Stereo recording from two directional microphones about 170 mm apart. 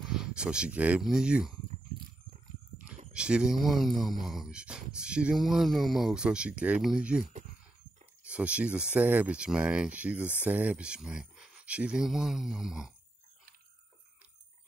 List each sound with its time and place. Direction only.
0.0 s speech: 5° right (ahead or behind)
3.1 s speech: 5° right (ahead or behind)